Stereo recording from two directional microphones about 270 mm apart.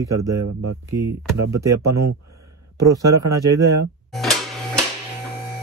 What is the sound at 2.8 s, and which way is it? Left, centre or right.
Speech, right.